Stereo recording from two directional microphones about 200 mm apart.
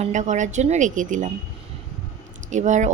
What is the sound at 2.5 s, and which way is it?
Speech, 35° right (ahead or behind).